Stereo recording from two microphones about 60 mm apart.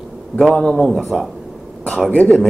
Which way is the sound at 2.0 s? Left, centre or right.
Left.